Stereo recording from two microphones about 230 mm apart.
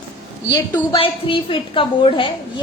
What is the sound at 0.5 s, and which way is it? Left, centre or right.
A woman's voice, centre.